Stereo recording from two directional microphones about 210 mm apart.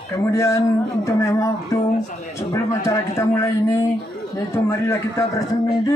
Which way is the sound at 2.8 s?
15° left (ahead or behind).